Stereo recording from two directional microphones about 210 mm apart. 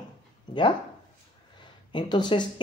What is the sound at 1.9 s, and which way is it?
Speech, 20° left (ahead or behind).